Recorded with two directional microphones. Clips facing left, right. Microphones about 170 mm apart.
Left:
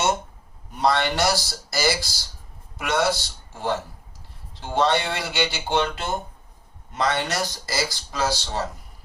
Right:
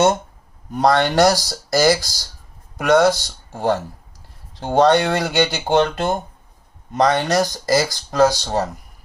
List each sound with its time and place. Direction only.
0.7 s speech: 45° right (ahead or behind)